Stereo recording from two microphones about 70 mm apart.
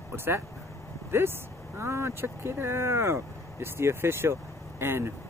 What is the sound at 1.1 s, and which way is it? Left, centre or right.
Speech, right.